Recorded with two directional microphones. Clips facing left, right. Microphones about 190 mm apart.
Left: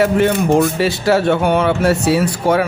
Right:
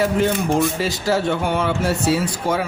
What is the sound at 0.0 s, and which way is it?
A man's voice, 65° left (ahead or behind).